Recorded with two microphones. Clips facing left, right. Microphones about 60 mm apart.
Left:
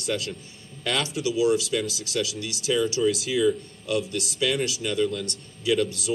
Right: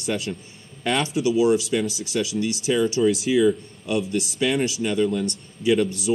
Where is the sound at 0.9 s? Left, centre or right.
Right.